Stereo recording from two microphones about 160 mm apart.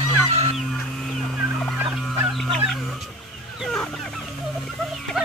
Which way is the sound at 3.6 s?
5° left (ahead or behind).